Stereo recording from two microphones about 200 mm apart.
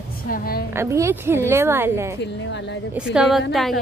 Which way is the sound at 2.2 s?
60° left (ahead or behind).